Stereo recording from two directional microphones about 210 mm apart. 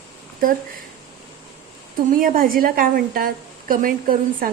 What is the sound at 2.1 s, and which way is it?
A woman's voice, 40° right (ahead or behind).